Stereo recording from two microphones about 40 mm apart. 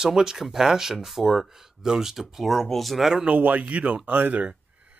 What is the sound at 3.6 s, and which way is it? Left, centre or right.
Speech, right.